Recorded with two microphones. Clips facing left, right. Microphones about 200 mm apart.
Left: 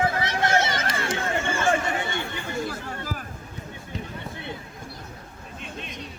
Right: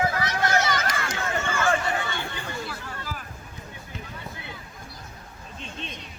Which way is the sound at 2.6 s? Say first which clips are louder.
Left 4 dB; 45° left (ahead or behind).